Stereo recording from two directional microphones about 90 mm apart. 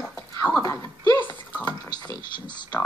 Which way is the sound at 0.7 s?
35° left (ahead or behind).